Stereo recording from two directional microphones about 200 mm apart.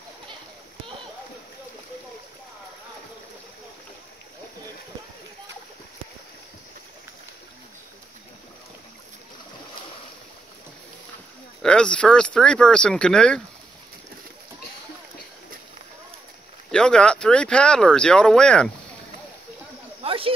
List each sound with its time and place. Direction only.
11.6 s speech: 5° left (ahead or behind)
16.7 s speech: 5° left (ahead or behind)
20.0 s snake: 30° right (ahead or behind)